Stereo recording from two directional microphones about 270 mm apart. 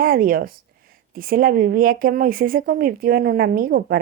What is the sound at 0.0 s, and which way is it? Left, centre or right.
Speech, right.